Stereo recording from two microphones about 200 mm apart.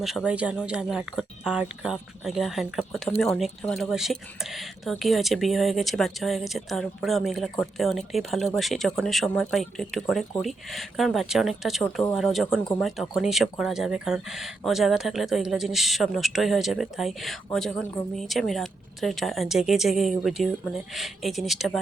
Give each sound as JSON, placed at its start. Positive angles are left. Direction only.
{"t": 0.0, "sound": "speech", "side_deg": -5}